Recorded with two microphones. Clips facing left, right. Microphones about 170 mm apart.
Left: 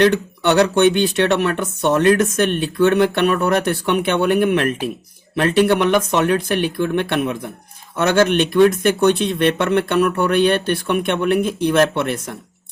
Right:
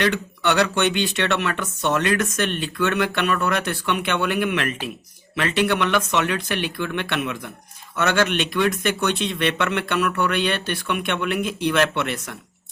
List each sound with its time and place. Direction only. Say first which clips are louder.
0.0 s speech: left 7 dB; 45° left (ahead or behind)